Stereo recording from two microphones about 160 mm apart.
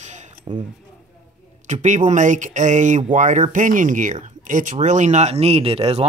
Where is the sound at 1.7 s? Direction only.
50° right (ahead or behind).